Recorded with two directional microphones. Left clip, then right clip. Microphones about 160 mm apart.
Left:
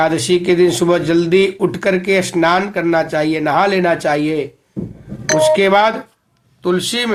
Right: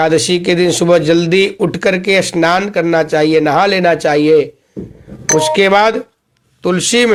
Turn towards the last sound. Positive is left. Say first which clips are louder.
# right 5 dB
turn(degrees=-50)  # may be behind; listen again after turning